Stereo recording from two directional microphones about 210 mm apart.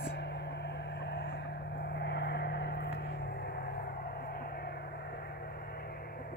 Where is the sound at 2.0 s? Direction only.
55° left (ahead or behind).